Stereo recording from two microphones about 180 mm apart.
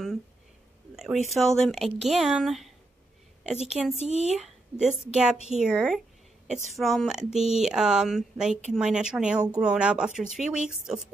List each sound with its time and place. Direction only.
0.9 s a sound: 5° right (ahead or behind)
1.3 s speech: centre (ahead or behind)
3.4 s speech: 40° right (ahead or behind)
4.7 s speech: 5° right (ahead or behind)